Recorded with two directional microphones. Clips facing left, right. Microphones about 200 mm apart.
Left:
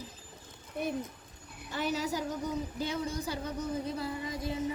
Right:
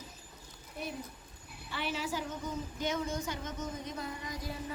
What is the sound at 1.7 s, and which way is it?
A woman's voice, 40° left (ahead or behind).